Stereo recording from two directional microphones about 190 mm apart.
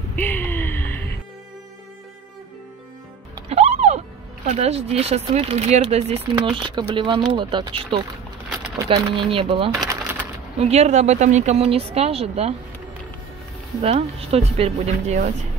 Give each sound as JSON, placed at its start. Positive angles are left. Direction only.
{"t": 0.1, "sound": "gasp", "side_deg": 10}
{"t": 3.4, "sound": "music", "side_deg": -35}
{"t": 4.5, "sound": "speech", "side_deg": -35}
{"t": 9.8, "sound": "a sound", "side_deg": -10}
{"t": 10.6, "sound": "speech", "side_deg": -35}
{"t": 13.8, "sound": "speech", "side_deg": -30}